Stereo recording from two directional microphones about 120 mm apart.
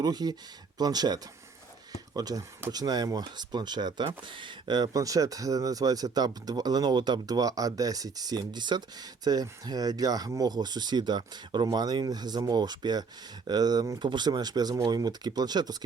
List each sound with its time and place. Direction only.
0.0 s speech: 35° right (ahead or behind)